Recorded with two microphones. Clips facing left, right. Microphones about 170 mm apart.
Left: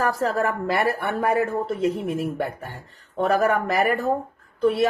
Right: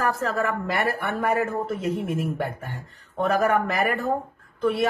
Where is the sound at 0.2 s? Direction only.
35° left (ahead or behind).